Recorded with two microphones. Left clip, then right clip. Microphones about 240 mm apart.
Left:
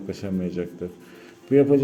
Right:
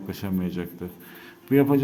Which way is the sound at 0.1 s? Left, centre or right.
Centre.